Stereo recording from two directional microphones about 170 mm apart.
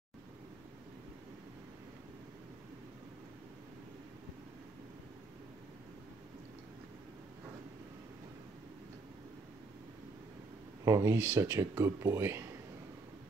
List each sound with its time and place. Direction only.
10.9 s speech: 15° right (ahead or behind)